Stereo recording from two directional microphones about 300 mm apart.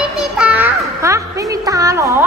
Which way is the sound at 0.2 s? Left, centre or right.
Centre.